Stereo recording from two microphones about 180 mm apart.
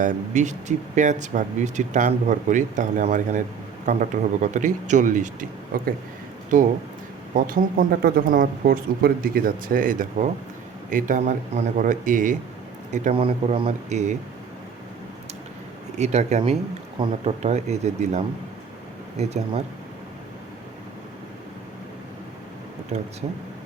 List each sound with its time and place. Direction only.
0.0 s speech: 45° right (ahead or behind)
7.3 s speech: 50° right (ahead or behind)
13.1 s speech: 30° right (ahead or behind)
16.0 s speech: 40° right (ahead or behind)